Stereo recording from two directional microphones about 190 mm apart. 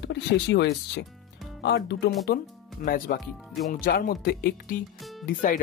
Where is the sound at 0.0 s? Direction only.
65° left (ahead or behind).